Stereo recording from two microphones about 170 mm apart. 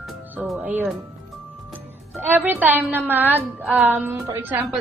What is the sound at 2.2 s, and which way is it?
A woman's voice, 10° right (ahead or behind).